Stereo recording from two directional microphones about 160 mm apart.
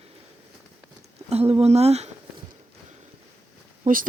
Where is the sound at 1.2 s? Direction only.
40° right (ahead or behind).